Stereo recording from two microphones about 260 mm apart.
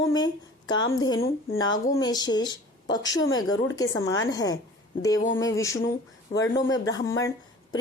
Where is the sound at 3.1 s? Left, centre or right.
Left.